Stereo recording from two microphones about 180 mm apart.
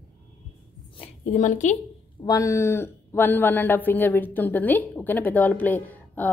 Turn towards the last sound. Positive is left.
turn(degrees=10)  # may be behind; listen again after turning